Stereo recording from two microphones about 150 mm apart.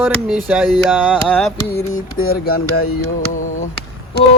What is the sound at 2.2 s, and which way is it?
Speech, 85° left.